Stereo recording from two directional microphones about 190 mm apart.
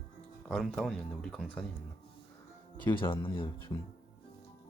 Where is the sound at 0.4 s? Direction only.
Centre (ahead or behind).